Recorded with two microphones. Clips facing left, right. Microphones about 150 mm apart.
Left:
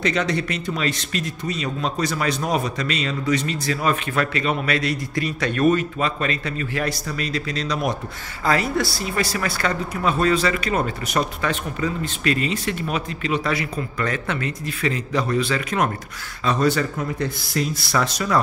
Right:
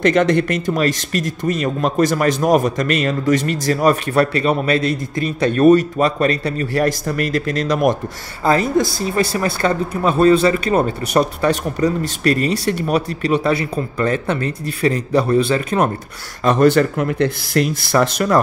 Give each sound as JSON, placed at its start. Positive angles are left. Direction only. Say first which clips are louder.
{"t": 0.0, "sound": "speech", "louder": "right 8 dB", "side_deg": -50}
{"t": 9.0, "sound": "speech", "louder": "right 6 dB", "side_deg": -30}
{"t": 16.4, "sound": "speech", "louder": "right 7 dB", "side_deg": -60}